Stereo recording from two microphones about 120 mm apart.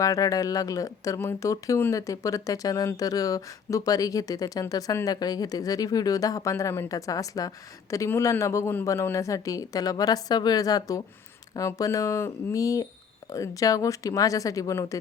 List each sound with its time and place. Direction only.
0.0 s speech: 30° left (ahead or behind)